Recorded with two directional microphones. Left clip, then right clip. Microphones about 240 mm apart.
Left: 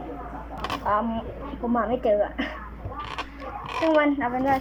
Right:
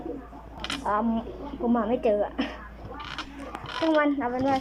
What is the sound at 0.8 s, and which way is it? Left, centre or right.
A woman's voice, centre.